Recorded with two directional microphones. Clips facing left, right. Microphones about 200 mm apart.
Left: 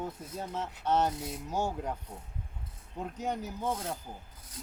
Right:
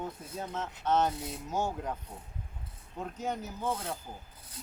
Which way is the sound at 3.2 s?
15° left (ahead or behind).